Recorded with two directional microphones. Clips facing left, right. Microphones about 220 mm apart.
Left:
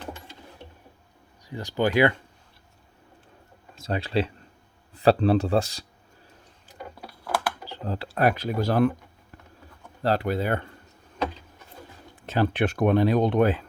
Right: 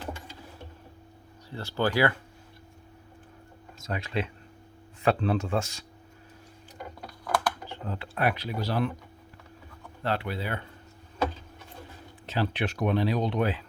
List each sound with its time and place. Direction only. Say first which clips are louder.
1.5 s speech: left 3 dB; 15° left (ahead or behind)
3.8 s speech: left 6 dB; 30° left (ahead or behind)
7.0 s a sound: even; 5° left (ahead or behind)
7.7 s speech: left 4 dB; 35° left (ahead or behind)
10.0 s speech: left 6 dB; 40° left (ahead or behind)
12.2 s speech: left 6 dB; 50° left (ahead or behind)